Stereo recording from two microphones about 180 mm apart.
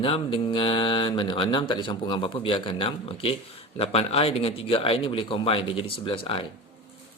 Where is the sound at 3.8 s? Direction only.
35° left (ahead or behind).